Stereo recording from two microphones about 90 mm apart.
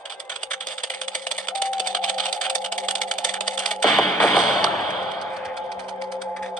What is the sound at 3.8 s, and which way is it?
Music, centre (ahead or behind).